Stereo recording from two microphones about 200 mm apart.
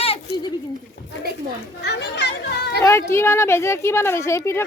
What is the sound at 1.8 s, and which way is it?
Speech, 55° left (ahead or behind).